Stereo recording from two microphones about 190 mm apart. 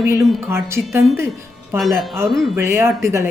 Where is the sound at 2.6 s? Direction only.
15° right (ahead or behind).